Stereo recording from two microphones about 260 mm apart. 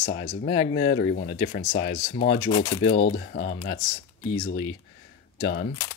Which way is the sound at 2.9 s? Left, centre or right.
Left.